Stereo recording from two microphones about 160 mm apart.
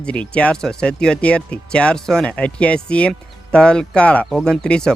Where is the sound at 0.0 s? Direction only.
10° left (ahead or behind).